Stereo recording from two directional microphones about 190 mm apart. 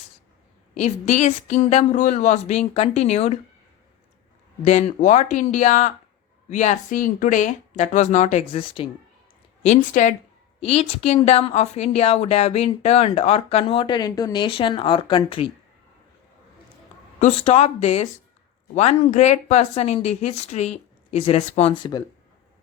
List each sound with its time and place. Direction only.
0.7 s a woman's voice: 40° left (ahead or behind)
4.6 s a woman's voice: 35° left (ahead or behind)
9.6 s a woman's voice: 40° left (ahead or behind)
17.2 s a woman's voice: 40° left (ahead or behind)